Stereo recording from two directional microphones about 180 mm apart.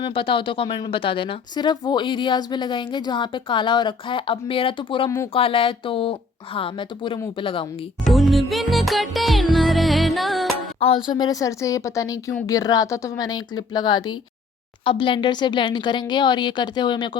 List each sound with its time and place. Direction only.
0.0 s a woman's voice: 30° left (ahead or behind)
5.0 s speech: 15° left (ahead or behind)
5.3 s a woman's voice: 30° left (ahead or behind)
8.0 s music: centre (ahead or behind)
10.8 s speech: 35° left (ahead or behind)
11.1 s a woman's voice: 20° left (ahead or behind)